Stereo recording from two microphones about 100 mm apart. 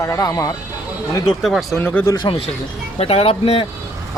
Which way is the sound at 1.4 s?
Centre (ahead or behind).